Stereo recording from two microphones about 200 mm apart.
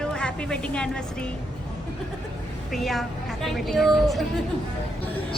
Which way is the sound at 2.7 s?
Centre (ahead or behind).